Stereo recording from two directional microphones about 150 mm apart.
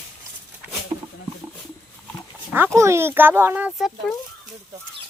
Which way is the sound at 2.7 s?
20° right (ahead or behind).